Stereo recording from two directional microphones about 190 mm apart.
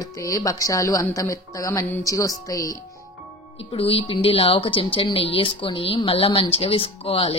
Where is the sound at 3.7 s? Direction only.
30° left (ahead or behind).